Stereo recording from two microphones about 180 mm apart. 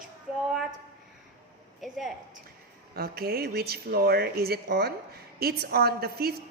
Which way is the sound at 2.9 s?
60° right (ahead or behind).